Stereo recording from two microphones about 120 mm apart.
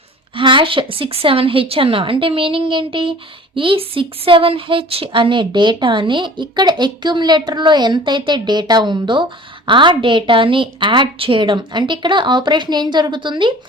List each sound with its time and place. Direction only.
0.3 s a woman's voice: 45° right (ahead or behind)